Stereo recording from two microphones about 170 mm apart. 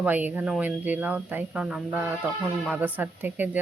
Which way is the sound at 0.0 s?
10° right (ahead or behind).